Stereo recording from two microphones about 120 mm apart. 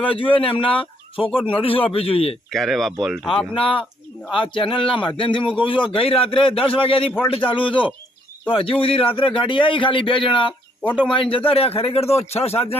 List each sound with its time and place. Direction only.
0.1 s a man's voice: 50° left (ahead or behind)
2.5 s speech: centre (ahead or behind)
3.5 s a man's voice: 45° left (ahead or behind)